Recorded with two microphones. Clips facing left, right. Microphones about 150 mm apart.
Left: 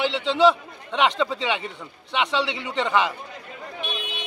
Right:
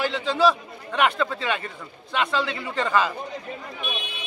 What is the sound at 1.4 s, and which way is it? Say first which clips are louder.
Speech: left 1 dB; 20° left (ahead or behind).